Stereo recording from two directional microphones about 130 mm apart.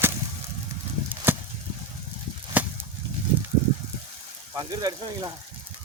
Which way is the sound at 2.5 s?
10° right (ahead or behind).